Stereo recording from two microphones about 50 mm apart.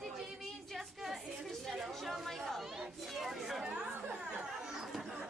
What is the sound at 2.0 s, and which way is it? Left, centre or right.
Chatter, centre.